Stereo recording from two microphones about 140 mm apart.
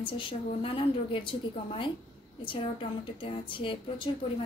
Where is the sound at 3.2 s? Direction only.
40° left (ahead or behind).